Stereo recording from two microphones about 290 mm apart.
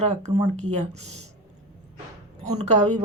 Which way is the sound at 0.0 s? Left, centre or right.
Right.